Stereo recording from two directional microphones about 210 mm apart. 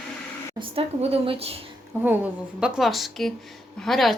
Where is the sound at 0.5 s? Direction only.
30° right (ahead or behind).